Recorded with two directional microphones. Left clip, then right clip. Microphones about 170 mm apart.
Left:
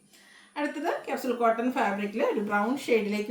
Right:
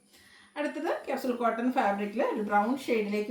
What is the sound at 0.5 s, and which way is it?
Speech, 20° left (ahead or behind).